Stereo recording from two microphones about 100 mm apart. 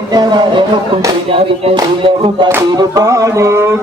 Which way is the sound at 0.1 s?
45° right (ahead or behind).